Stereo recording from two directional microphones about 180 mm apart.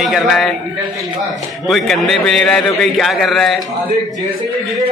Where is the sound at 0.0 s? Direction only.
Centre (ahead or behind).